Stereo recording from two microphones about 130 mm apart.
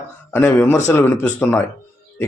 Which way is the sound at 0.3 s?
15° left (ahead or behind).